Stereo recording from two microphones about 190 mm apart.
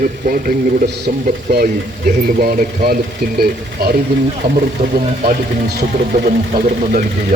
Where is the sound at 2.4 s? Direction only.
50° right (ahead or behind).